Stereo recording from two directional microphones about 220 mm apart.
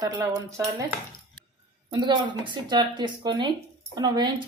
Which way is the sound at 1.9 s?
20° right (ahead or behind).